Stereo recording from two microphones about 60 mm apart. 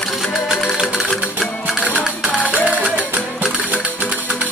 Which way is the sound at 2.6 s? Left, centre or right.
Right.